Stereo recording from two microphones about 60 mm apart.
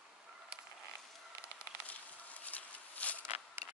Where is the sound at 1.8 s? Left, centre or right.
Left.